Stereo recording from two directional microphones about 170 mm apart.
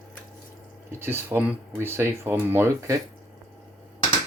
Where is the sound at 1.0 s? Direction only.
15° right (ahead or behind).